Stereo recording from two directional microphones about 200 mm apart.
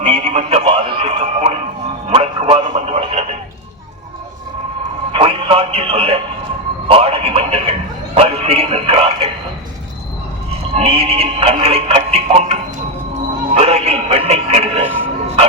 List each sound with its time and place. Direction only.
0.0 s music: 30° right (ahead or behind)
5.1 s music: 30° right (ahead or behind)
6.8 s a sound: 30° right (ahead or behind)
10.5 s music: 30° right (ahead or behind)